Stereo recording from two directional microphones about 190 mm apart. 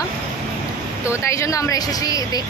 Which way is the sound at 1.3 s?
15° left (ahead or behind).